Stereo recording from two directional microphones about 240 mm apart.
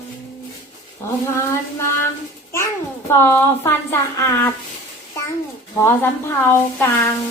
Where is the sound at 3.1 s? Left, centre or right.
Centre.